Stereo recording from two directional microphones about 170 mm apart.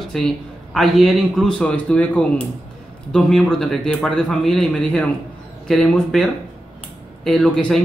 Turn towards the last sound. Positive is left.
turn(degrees=0)  # may be behind; listen again after turning